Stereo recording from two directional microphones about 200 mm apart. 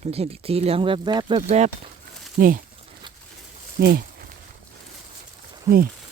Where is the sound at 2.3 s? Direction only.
45° right (ahead or behind).